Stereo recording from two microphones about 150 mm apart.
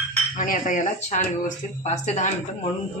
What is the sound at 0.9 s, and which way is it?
A woman's voice, 50° left (ahead or behind).